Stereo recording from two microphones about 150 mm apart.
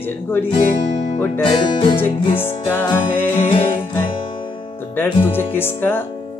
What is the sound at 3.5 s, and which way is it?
Music, 35° left (ahead or behind).